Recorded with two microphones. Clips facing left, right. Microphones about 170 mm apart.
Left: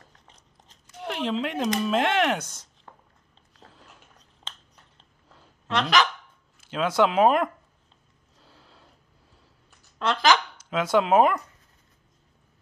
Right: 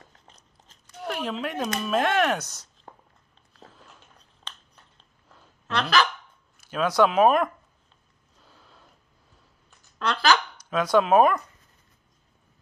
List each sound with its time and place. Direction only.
1.0 s speech: 25° left (ahead or behind)
5.7 s speech: 20° left (ahead or behind)
8.4 s a sound: 30° left (ahead or behind)
9.9 s speech: 20° left (ahead or behind)